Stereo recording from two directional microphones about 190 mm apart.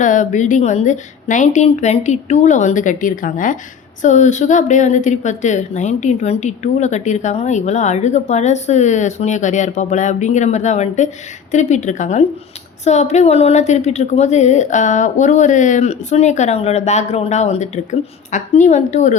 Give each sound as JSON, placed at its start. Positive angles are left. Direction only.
{"t": 0.0, "sound": "a woman's voice", "side_deg": 40}